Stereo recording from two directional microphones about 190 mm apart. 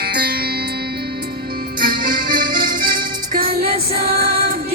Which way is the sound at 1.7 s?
50° right (ahead or behind).